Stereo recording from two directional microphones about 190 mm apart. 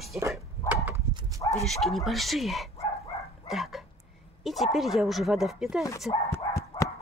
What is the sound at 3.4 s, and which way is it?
Dog, centre (ahead or behind).